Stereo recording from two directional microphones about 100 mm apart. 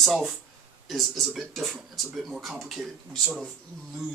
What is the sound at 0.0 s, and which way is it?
Speech, centre (ahead or behind).